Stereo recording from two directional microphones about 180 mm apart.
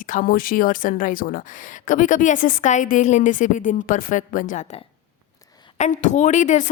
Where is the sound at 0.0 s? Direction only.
50° left (ahead or behind).